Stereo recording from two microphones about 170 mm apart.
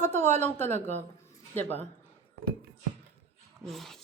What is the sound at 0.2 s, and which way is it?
Speech, 40° right (ahead or behind).